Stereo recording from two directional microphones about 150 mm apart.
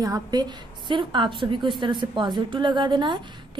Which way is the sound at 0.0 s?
25° right (ahead or behind).